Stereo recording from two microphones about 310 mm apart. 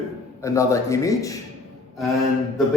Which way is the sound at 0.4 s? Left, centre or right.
Centre.